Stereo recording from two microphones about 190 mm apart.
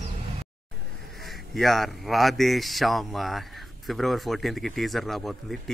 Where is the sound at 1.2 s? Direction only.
Centre (ahead or behind).